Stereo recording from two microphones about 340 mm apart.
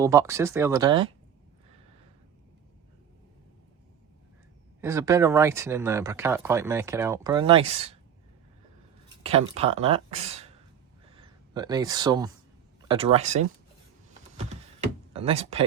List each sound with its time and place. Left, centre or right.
0.0 s speech: centre
4.8 s speech: centre
9.2 s speech: centre
14.3 s power windows: centre